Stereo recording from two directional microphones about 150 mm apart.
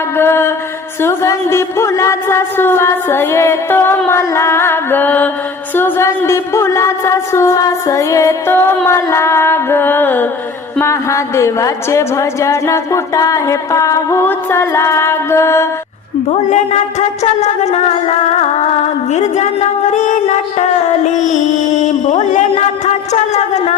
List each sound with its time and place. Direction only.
0.2 s music: 15° left (ahead or behind)
1.0 s a woman's voice: 20° left (ahead or behind)
16.3 s a sound: 50° left (ahead or behind)